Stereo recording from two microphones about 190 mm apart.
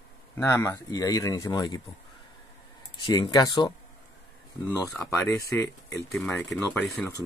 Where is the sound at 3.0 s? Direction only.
20° left (ahead or behind).